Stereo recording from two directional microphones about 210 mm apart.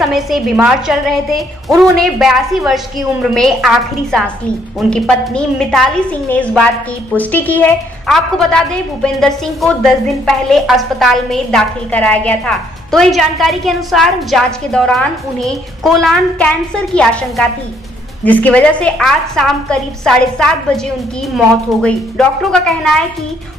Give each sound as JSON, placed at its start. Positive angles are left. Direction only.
{"t": 0.0, "sound": "a woman's voice", "side_deg": 0}
{"t": 21.8, "sound": "a woman's voice", "side_deg": 5}